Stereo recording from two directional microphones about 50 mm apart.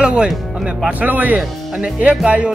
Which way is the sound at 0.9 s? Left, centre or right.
Right.